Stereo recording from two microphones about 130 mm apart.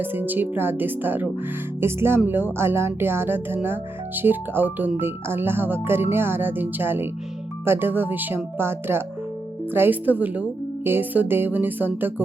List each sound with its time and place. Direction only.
0.0 s speech: 15° right (ahead or behind)